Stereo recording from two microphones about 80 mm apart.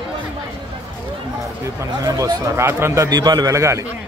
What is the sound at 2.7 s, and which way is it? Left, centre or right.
Speech, right.